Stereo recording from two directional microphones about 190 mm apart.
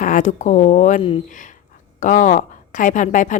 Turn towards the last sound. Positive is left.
turn(degrees=40)  # may be behind; listen again after turning